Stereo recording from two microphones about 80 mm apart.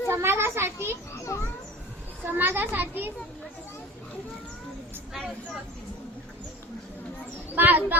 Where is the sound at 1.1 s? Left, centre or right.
Left.